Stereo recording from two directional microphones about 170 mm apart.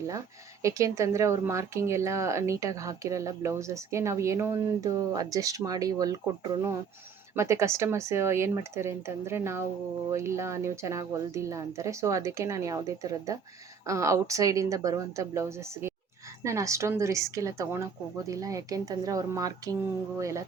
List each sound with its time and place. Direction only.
0.6 s a woman's voice: 20° right (ahead or behind)